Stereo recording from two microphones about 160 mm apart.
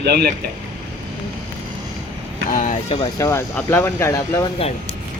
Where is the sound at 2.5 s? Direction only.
50° left (ahead or behind).